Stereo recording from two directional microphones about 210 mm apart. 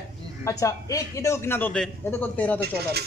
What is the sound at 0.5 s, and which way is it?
A man's voice, 15° left (ahead or behind).